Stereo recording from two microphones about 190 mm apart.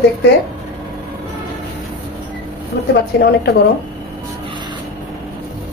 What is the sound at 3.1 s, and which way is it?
Speech, 60° left (ahead or behind).